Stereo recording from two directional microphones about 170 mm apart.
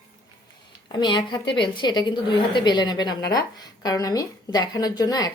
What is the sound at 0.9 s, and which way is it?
A woman's voice, 25° left (ahead or behind).